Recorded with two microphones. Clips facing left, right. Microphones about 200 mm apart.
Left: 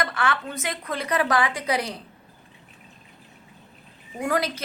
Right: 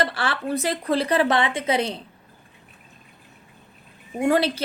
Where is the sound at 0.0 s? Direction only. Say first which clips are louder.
Right 1 dB; 30° right (ahead or behind).